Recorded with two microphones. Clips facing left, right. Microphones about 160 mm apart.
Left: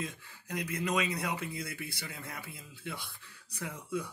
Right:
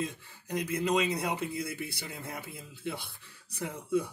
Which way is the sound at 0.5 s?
20° right (ahead or behind).